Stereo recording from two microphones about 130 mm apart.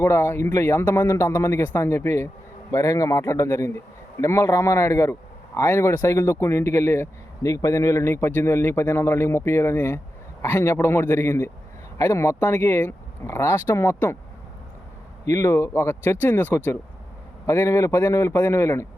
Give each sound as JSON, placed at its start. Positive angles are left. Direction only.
{"t": 0.0, "sound": "a man's voice", "side_deg": 20}
{"t": 15.2, "sound": "speech", "side_deg": 25}